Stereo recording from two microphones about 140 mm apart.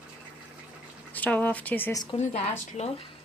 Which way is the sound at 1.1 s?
10° left (ahead or behind).